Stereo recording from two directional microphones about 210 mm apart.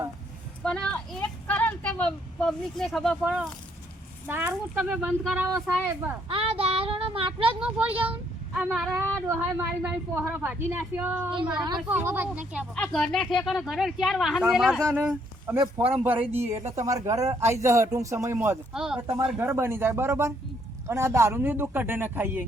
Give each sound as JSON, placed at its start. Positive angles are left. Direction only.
{"t": 0.6, "sound": "a woman's voice", "side_deg": 5}
{"t": 6.2, "sound": "speech", "side_deg": -25}
{"t": 7.6, "sound": "a woman's voice", "side_deg": -5}
{"t": 9.2, "sound": "a woman's voice", "side_deg": -15}
{"t": 12.7, "sound": "speech", "side_deg": 5}
{"t": 15.6, "sound": "speech", "side_deg": -25}
{"t": 16.0, "sound": "a woman's voice", "side_deg": -10}
{"t": 19.0, "sound": "a woman's voice", "side_deg": -15}